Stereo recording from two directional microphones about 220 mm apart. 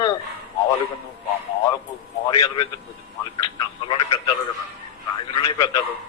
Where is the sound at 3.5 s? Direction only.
20° left (ahead or behind).